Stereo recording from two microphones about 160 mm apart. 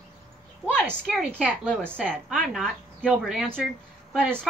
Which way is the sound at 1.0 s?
Centre (ahead or behind).